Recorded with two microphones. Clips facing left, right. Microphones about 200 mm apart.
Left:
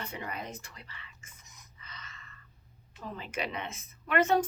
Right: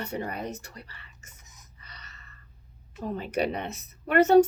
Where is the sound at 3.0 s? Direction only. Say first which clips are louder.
Right 9 dB; 40° right (ahead or behind).